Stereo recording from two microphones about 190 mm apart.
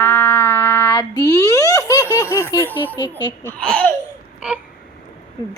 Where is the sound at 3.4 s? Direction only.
5° left (ahead or behind).